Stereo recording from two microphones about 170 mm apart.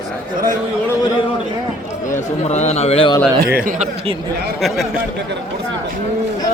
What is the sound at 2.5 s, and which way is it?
Speech, 40° left (ahead or behind).